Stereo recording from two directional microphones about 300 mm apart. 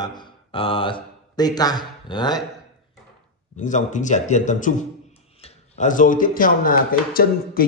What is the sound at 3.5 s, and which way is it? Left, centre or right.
Speech, left.